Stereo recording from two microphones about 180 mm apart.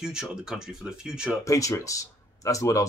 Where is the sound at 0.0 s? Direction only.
5° right (ahead or behind).